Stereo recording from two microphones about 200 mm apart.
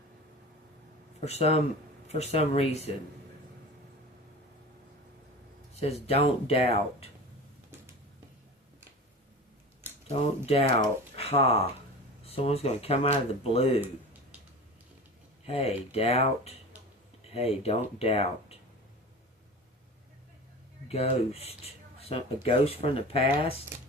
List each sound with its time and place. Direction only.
1.2 s speech: 30° left (ahead or behind)
5.8 s speech: 30° left (ahead or behind)
10.1 s speech: 30° left (ahead or behind)
15.4 s speech: 30° left (ahead or behind)
20.8 s speech: 30° left (ahead or behind)